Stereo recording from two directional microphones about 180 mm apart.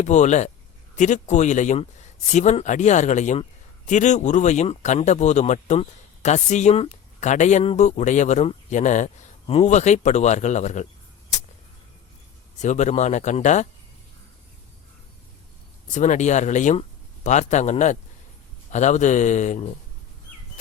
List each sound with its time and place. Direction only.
0.0 s speech: 40° left (ahead or behind)
12.5 s speech: 40° left (ahead or behind)
15.9 s speech: 40° left (ahead or behind)